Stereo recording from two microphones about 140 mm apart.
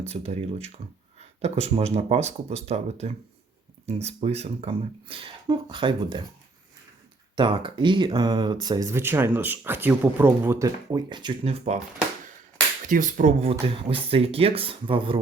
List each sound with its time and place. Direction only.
0.0 s speech: 50° right (ahead or behind); by 6.2 s 35° right (ahead or behind)
7.3 s speech: 35° right (ahead or behind); by 10.7 s 15° right (ahead or behind)
10.9 s speech: 30° right (ahead or behind)
11.4 s speech: 55° right (ahead or behind)
12.9 s speech: 70° right (ahead or behind); by 15.2 s 40° right (ahead or behind)